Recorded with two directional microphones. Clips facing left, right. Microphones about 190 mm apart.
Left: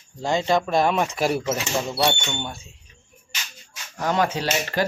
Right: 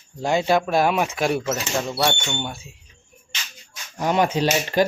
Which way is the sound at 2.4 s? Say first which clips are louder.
Right 2 dB; 5° right (ahead or behind).